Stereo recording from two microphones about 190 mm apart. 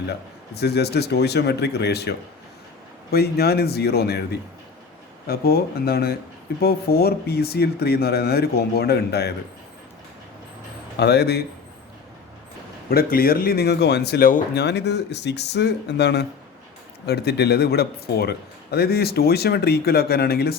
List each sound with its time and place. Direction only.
0.1 s a man's voice: 60° left (ahead or behind)
10.9 s a man's voice: 60° left (ahead or behind)
12.9 s a man's voice: 50° left (ahead or behind)